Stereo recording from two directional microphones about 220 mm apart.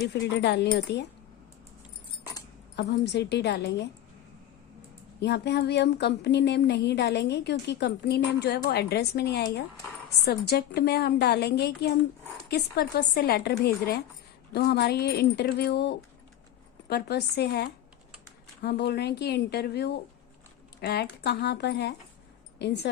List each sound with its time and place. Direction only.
0.1 s speech: 50° left (ahead or behind)
2.7 s speech: 50° left (ahead or behind)
5.2 s a woman's voice: 50° left (ahead or behind)